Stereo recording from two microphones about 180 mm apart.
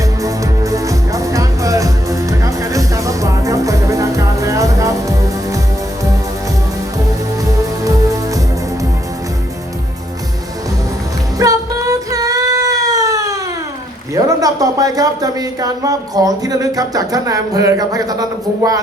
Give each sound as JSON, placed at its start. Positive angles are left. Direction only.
{"t": 0.2, "sound": "music", "side_deg": -20}
{"t": 11.3, "sound": "cat", "side_deg": -20}
{"t": 14.1, "sound": "speech", "side_deg": -20}